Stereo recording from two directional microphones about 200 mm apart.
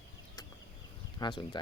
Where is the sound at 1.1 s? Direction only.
20° left (ahead or behind).